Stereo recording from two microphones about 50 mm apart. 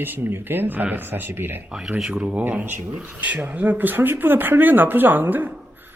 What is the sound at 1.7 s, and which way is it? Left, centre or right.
Speech, centre.